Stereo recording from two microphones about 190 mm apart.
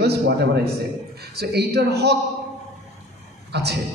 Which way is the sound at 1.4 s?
60° right (ahead or behind).